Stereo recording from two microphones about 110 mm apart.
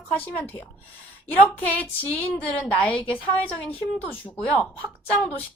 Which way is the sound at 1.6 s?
15° left (ahead or behind).